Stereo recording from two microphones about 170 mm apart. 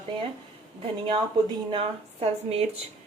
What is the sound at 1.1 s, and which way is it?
A woman's voice, 30° right (ahead or behind).